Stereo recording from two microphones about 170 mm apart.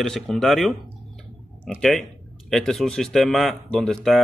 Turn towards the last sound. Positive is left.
turn(degrees=0)  # may be behind; listen again after turning